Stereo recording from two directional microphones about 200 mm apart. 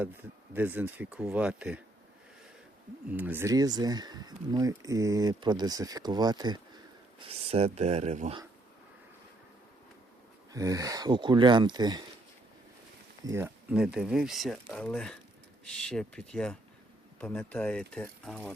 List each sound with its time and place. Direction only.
0.5 s speech: 10° right (ahead or behind)
3.1 s speech: 10° right (ahead or behind); by 8.4 s 35° right (ahead or behind)
10.5 s speech: 15° right (ahead or behind)
13.2 s speech: 10° right (ahead or behind)